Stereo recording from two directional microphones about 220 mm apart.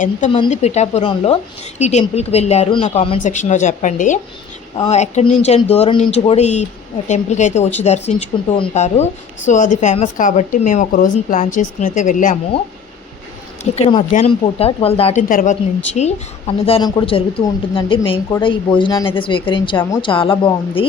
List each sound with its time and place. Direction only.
0.3 s a woman's voice: 25° left (ahead or behind)
13.7 s speech: 25° left (ahead or behind)